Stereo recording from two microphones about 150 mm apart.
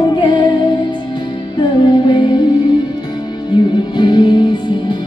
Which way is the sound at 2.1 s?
30° left (ahead or behind).